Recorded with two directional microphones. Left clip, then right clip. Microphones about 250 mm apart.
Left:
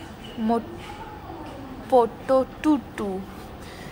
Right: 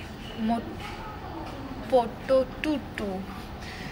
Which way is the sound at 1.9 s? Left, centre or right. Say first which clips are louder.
Left 4 dB; left.